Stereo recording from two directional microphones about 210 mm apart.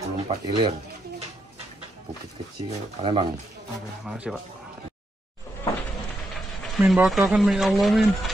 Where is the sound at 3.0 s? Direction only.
25° right (ahead or behind).